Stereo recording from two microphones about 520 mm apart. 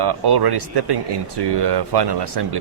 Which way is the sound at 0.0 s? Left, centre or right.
Right.